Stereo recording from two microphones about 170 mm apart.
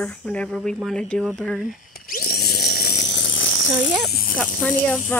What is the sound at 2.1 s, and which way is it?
Electric toothbrush, 65° left (ahead or behind).